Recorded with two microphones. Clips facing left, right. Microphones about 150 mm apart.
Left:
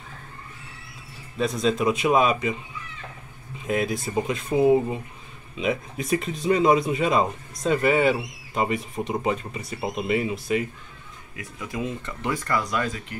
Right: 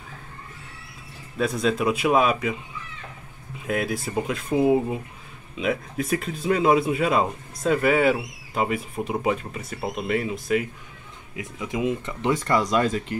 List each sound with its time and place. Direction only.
1.4 s speech: 5° right (ahead or behind)
3.6 s speech: centre (ahead or behind)
11.3 s speech: 20° right (ahead or behind)